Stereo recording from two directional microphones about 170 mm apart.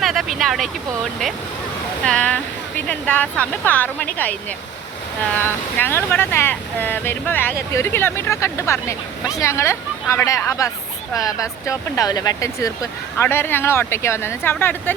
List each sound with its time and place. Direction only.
0.0 s speech: centre (ahead or behind)
2.0 s speech: 5° left (ahead or behind)
5.4 s speech: 10° left (ahead or behind)